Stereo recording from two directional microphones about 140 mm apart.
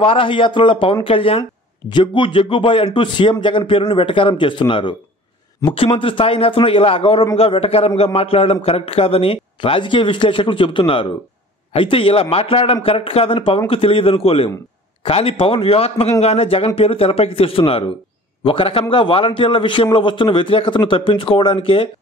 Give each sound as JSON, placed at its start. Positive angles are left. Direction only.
{"t": 0.0, "sound": "a man's voice", "side_deg": 40}